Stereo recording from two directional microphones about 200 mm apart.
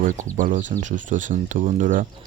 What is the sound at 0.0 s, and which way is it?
Speech, 40° right (ahead or behind).